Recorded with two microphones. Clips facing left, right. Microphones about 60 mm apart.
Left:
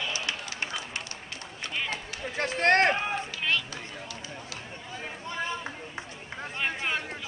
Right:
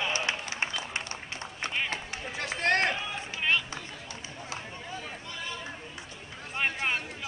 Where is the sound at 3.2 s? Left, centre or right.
Right.